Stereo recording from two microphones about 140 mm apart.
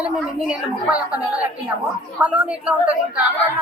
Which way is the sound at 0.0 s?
5° right (ahead or behind).